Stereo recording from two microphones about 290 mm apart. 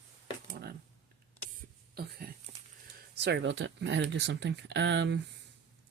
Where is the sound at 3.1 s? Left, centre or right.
Right.